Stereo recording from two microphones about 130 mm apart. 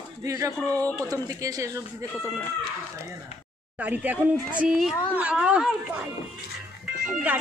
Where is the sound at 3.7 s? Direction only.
10° right (ahead or behind).